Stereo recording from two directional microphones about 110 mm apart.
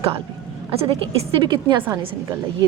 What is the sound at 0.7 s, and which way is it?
A woman's voice, 60° right (ahead or behind).